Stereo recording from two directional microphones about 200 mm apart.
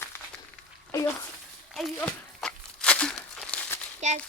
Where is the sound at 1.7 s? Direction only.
5° left (ahead or behind).